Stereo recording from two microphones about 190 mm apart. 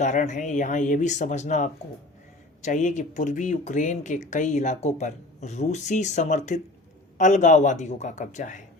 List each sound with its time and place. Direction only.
0.0 s speech: 40° left (ahead or behind)